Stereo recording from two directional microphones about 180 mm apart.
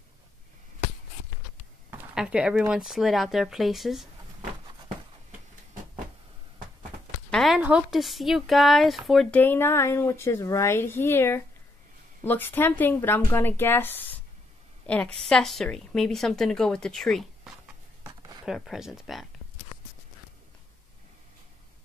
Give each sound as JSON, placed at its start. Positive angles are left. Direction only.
{"t": 1.9, "sound": "a woman's voice", "side_deg": -10}
{"t": 7.2, "sound": "a woman's voice", "side_deg": 0}
{"t": 18.0, "sound": "a sound", "side_deg": -20}
{"t": 18.4, "sound": "a woman's voice", "side_deg": -5}